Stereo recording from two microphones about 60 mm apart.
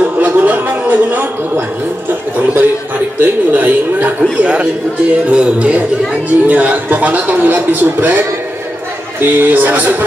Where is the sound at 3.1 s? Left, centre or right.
Right.